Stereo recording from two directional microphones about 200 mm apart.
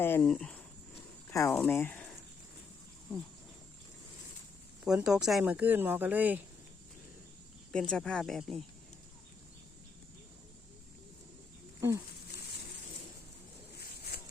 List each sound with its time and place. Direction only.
0.0 s speech: 10° left (ahead or behind)
4.9 s speech: 5° right (ahead or behind)
7.7 s speech: 5° left (ahead or behind)
13.7 s a sound: 50° left (ahead or behind)